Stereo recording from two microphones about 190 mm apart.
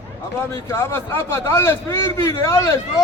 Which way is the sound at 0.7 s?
15° left (ahead or behind).